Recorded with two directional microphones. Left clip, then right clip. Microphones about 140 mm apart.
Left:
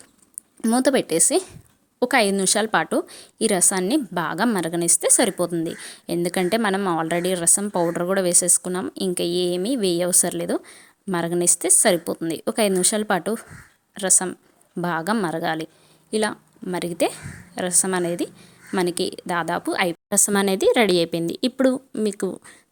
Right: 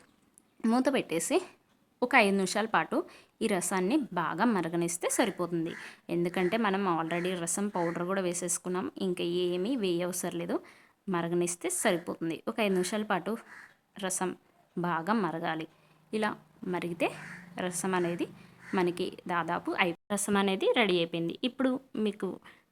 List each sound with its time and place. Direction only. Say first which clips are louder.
0.8 s a woman's voice: left 11 dB; 40° left (ahead or behind)
7.0 s a woman's voice: left 10 dB; 50° left (ahead or behind)
22.0 s a woman's voice: left 10 dB; 40° left (ahead or behind)